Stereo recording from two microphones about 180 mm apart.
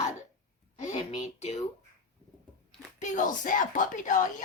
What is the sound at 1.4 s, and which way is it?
Speech, 35° left (ahead or behind).